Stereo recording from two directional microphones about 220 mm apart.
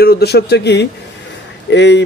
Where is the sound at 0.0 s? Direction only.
45° left (ahead or behind).